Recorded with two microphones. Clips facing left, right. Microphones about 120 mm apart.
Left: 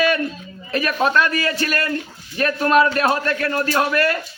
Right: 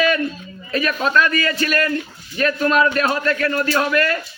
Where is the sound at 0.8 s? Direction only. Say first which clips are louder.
Even; 45° left (ahead or behind).